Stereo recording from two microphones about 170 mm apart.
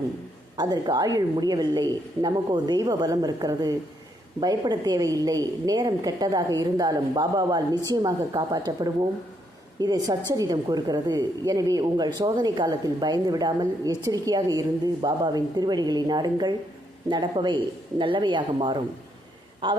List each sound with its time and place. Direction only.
0.5 s a woman's voice: 25° right (ahead or behind)
9.8 s a woman's voice: 25° right (ahead or behind)